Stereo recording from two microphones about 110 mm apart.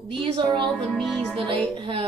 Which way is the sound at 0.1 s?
45° right (ahead or behind).